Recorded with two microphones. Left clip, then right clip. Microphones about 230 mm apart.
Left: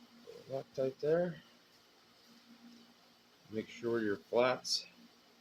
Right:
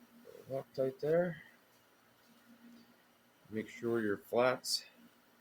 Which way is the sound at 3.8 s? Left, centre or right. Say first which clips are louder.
Even; right.